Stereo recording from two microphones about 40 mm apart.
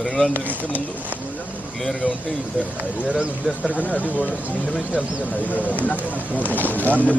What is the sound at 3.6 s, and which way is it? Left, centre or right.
Speech, left.